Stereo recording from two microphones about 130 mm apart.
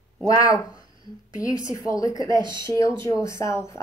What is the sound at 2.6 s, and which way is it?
Speech, 25° left (ahead or behind).